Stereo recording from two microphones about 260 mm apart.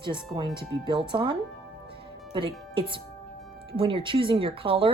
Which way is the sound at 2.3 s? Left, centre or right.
Centre.